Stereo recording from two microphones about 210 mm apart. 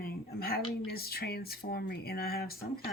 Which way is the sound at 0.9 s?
45° left (ahead or behind).